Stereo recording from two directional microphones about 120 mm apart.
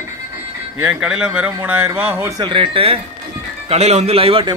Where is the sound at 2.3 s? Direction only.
40° right (ahead or behind).